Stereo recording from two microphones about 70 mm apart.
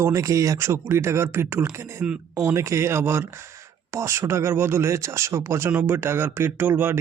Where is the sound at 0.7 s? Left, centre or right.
Right.